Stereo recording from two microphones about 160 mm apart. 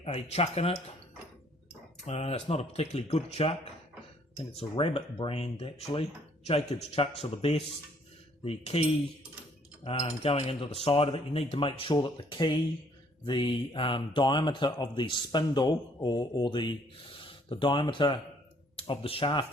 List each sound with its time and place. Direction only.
0.0 s speech: 40° left (ahead or behind)
2.0 s speech: 40° left (ahead or behind)
4.8 s speech: 30° left (ahead or behind)